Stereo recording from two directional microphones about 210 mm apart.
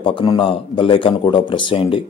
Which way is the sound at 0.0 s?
25° left (ahead or behind).